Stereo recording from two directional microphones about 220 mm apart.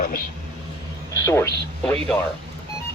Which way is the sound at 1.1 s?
15° left (ahead or behind).